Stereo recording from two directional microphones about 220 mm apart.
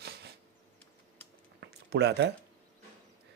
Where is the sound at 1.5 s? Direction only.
50° right (ahead or behind).